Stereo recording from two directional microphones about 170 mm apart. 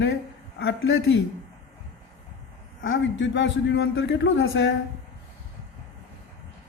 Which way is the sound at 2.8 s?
90° left.